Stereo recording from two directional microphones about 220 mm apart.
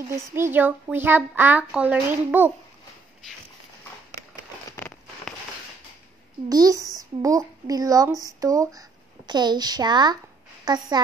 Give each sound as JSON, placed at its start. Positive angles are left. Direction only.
{"t": 0.3, "sound": "speech", "side_deg": -10}
{"t": 4.6, "sound": "a sound", "side_deg": 10}
{"t": 6.5, "sound": "a woman's voice", "side_deg": -15}